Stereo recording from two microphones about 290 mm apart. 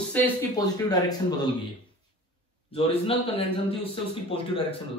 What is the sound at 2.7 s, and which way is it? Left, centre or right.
A man's voice, centre.